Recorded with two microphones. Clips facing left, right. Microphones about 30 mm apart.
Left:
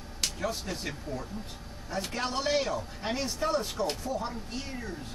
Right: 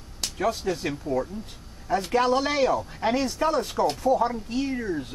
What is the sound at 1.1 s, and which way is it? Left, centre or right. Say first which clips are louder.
Speech: right 13 dB; centre.